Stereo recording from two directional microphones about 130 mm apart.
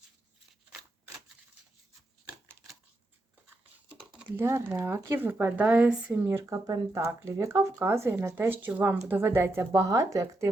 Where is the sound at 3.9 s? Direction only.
10° right (ahead or behind).